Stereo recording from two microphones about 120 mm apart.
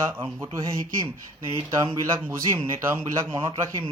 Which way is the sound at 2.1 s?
20° right (ahead or behind).